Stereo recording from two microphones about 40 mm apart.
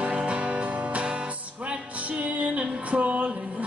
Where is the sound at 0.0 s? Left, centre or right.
Right.